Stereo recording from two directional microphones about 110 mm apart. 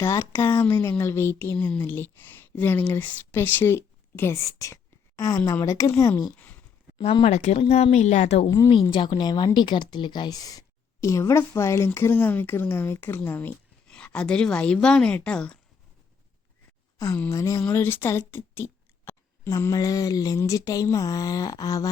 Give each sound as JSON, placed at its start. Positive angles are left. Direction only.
{"t": 0.0, "sound": "speech", "side_deg": 25}
{"t": 7.0, "sound": "speech", "side_deg": 60}
{"t": 8.4, "sound": "speech", "side_deg": 30}
{"t": 8.7, "sound": "a woman's voice", "side_deg": 50}
{"t": 17.2, "sound": "speech", "side_deg": 30}